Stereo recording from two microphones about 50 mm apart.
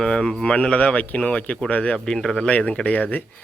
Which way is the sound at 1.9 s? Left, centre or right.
Centre.